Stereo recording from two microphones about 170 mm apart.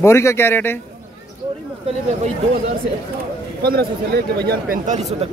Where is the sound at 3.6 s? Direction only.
70° right (ahead or behind).